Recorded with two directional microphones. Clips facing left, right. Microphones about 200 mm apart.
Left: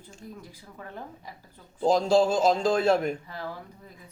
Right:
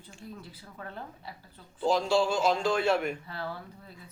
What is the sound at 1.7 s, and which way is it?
Speech, 40° left (ahead or behind).